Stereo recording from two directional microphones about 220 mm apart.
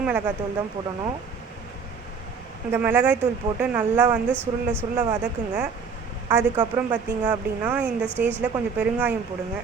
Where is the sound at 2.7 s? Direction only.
10° right (ahead or behind).